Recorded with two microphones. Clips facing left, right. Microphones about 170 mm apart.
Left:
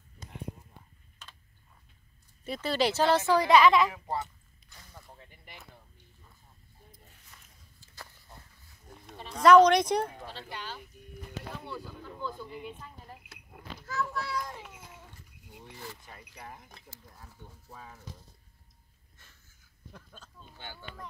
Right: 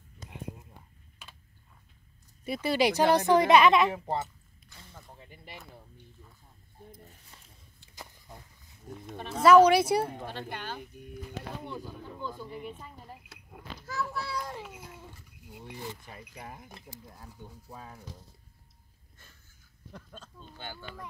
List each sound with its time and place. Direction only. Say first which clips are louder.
2.4 s speech: right 2 dB; 10° right (ahead or behind); by 4.2 s 30° right (ahead or behind)
7.9 s a sound: right 2 dB; 15° right (ahead or behind)
9.3 s speech: even; 5° right (ahead or behind)
10.1 s speech: right 4 dB; 55° right (ahead or behind)
11.6 s speech: right 1 dB; 20° right (ahead or behind)
12.8 s a sound: right 1 dB; 5° right (ahead or behind)
13.8 s speech: left 1 dB; 10° right (ahead or behind)
14.6 s a sound: right 4 dB; centre (ahead or behind)
15.4 s keys jangling: right 4 dB; 5° right (ahead or behind)
15.7 s speech: right 5 dB; 15° right (ahead or behind)
20.7 s speech: right 2 dB; 10° right (ahead or behind)